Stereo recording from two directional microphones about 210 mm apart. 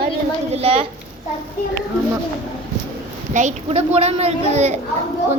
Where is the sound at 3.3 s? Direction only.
30° right (ahead or behind).